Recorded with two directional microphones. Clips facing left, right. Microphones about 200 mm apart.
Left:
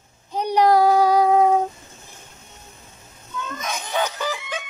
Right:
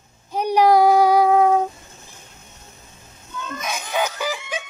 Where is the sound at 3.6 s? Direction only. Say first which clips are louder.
Right 1 dB; 5° right (ahead or behind).